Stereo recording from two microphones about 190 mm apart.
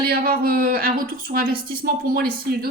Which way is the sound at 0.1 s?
50° right (ahead or behind).